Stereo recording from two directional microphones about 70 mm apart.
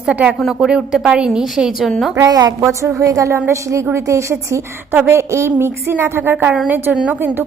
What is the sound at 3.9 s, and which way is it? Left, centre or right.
Speech, right.